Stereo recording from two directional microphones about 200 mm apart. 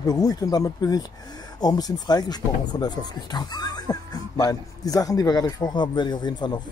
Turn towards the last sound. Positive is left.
turn(degrees=20)  # may be behind; listen again after turning